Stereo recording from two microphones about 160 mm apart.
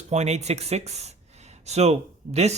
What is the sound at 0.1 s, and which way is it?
A man's voice, 45° right (ahead or behind).